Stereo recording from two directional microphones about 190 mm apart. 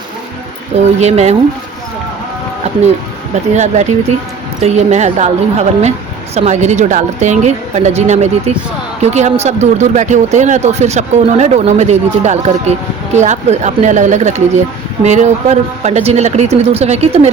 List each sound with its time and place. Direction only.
0.9 s speech: 35° right (ahead or behind)
3.5 s speech: 35° right (ahead or behind)